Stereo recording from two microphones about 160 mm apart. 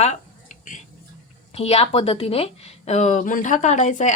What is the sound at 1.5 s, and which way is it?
A woman's voice, 40° left (ahead or behind).